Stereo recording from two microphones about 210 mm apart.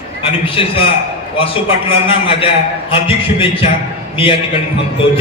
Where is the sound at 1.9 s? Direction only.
25° left (ahead or behind).